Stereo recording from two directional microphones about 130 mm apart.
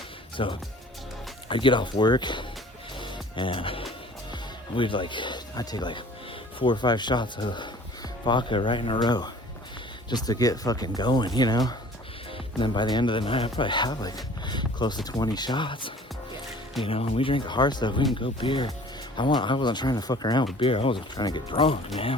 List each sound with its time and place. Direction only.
0.4 s speech: 40° left (ahead or behind)
3.0 s music: 40° left (ahead or behind)
4.8 s speech: 40° left (ahead or behind)